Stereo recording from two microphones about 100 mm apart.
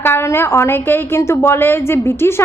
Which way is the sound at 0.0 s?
25° left (ahead or behind).